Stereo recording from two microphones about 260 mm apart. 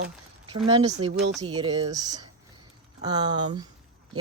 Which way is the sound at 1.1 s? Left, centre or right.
Right.